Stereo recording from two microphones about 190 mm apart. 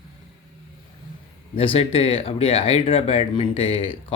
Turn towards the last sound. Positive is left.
turn(degrees=30)  # may be behind; listen again after turning